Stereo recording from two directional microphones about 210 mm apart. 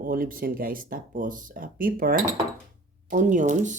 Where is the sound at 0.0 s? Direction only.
40° right (ahead or behind).